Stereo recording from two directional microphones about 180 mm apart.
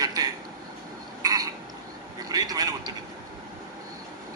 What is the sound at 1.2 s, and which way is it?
Frog, 20° right (ahead or behind).